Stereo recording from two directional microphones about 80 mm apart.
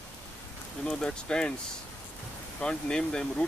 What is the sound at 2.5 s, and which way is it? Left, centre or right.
Speech, centre.